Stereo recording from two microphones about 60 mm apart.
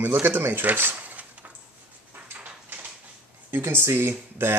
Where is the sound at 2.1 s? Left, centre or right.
Right.